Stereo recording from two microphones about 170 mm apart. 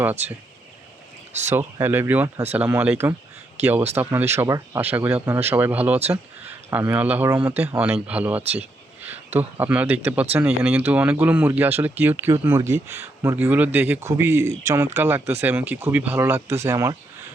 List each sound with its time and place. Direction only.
1.3 s speech: 40° right (ahead or behind)
1.5 s speech: 10° right (ahead or behind)